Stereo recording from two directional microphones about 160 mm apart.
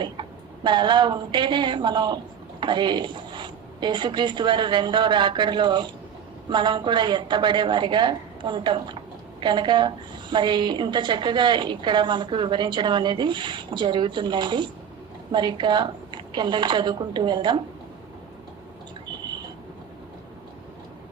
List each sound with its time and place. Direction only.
0.0 s a woman's voice: 30° right (ahead or behind)